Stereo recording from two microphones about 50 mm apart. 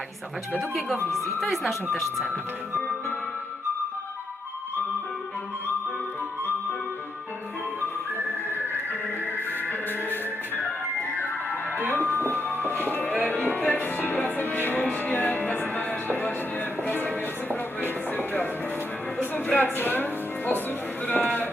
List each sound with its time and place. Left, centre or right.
0.7 s speech: centre
9.6 s music: left
11.8 s music: right
12.4 s music: left
21.1 s livestock: left